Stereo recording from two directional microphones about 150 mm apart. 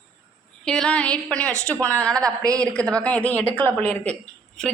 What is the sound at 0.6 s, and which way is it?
A woman's voice, 5° left (ahead or behind).